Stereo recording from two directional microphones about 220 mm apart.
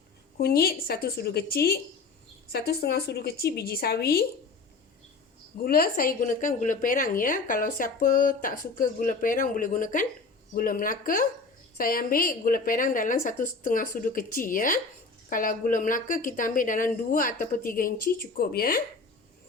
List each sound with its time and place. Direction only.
0.3 s a woman's voice: 45° left (ahead or behind)
5.6 s a woman's voice: 40° left (ahead or behind)